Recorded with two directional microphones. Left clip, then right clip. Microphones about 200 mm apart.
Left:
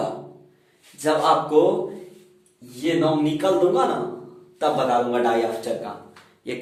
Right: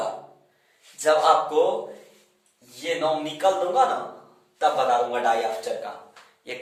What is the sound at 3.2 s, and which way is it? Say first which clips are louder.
Speech: left 3 dB; 10° left (ahead or behind).